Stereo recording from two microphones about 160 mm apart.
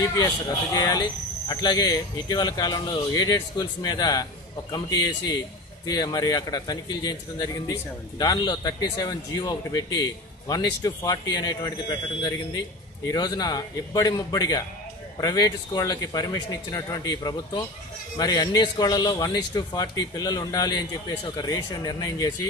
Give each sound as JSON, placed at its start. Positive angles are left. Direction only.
{"t": 0.7, "sound": "a man's voice", "side_deg": 25}